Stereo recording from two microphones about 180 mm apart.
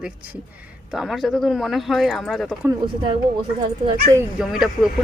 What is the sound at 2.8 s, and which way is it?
Speech, 25° right (ahead or behind).